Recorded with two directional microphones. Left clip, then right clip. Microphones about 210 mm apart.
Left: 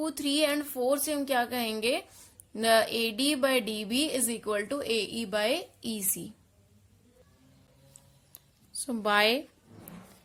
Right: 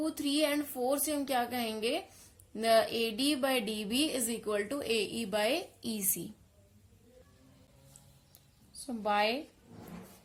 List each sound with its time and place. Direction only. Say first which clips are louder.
0.0 s a woman's voice: left 3 dB; 30° left (ahead or behind); by 6.3 s 15° left (ahead or behind)
8.9 s a woman's voice: left 5 dB; 40° left (ahead or behind)